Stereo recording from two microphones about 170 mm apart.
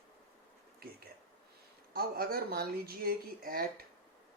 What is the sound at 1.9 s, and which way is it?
Speech, 60° right (ahead or behind).